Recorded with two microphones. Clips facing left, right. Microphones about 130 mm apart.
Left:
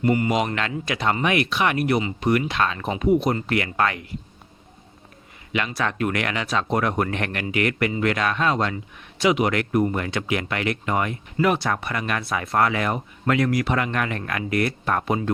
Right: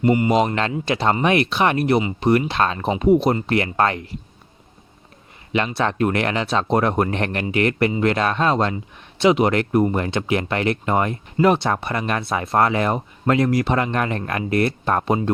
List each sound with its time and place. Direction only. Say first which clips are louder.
0.0 s speech: right 4 dB; 25° right (ahead or behind)
5.5 s speech: right 4 dB; 30° right (ahead or behind)